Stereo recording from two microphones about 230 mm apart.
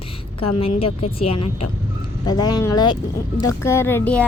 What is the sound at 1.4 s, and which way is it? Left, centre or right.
Speech, left.